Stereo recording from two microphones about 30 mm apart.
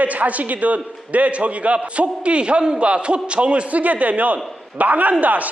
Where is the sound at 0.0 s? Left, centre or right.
Right.